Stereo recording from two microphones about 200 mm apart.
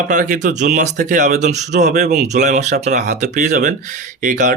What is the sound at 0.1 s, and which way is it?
Speech, 40° right (ahead or behind).